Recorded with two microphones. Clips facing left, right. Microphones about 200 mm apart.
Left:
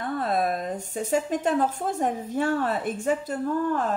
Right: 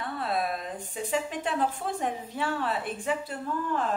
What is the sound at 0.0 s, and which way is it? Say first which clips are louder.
A woman's voice: left 5 dB; 45° left (ahead or behind).